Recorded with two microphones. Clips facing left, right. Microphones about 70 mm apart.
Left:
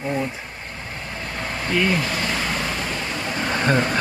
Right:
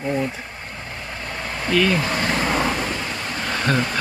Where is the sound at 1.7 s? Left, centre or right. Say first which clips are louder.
Right 2 dB; centre.